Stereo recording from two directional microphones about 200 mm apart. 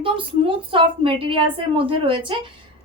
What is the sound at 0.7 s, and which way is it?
A woman's voice, 25° right (ahead or behind).